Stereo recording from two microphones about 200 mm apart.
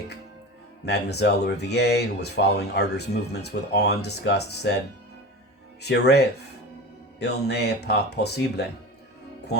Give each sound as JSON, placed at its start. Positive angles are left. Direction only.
{"t": 0.9, "sound": "speech", "side_deg": 55}
{"t": 5.8, "sound": "speech", "side_deg": 55}